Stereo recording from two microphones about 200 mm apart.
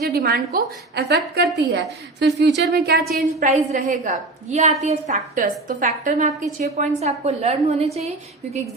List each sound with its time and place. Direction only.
0.0 s a woman's voice: 50° right (ahead or behind)
3.4 s a woman's voice: 35° right (ahead or behind)